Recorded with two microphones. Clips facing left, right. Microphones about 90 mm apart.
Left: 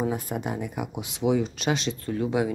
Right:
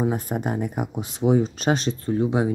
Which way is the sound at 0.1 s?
40° right (ahead or behind).